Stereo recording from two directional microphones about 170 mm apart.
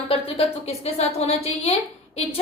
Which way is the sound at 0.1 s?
35° left (ahead or behind).